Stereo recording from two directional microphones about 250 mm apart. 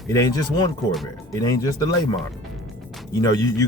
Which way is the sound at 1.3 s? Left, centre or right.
Centre.